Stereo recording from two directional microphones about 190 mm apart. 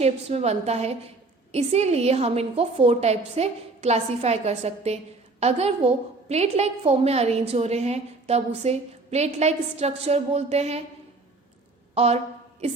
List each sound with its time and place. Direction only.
0.0 s a woman's voice: 35° right (ahead or behind)
11.9 s a woman's voice: 35° right (ahead or behind)